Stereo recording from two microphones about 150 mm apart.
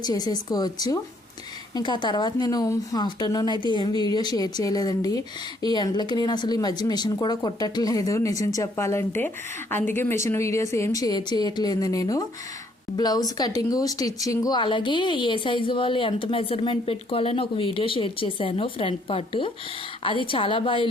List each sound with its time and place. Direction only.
0.0 s a woman's voice: 25° left (ahead or behind)